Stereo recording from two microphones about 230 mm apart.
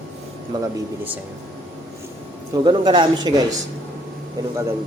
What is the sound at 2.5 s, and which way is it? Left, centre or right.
Speech, centre.